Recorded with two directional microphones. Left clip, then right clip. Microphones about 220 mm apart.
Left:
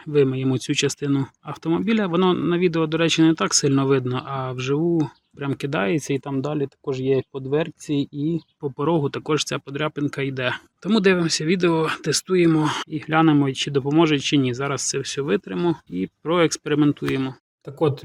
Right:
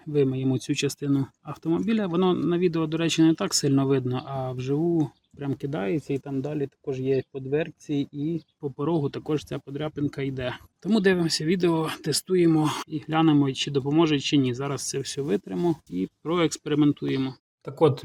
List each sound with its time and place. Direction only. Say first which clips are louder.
0.0 s speech: left 5 dB; centre (ahead or behind)
5.5 s speech: left 5 dB; 10° left (ahead or behind)
6.1 s speech: left 5 dB; 25° left (ahead or behind)
8.6 s speech: left 5 dB; 10° left (ahead or behind)
17.7 s speech: right 1 dB; 5° right (ahead or behind)